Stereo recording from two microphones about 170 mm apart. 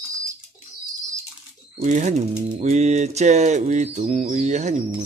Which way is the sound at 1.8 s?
45° right (ahead or behind).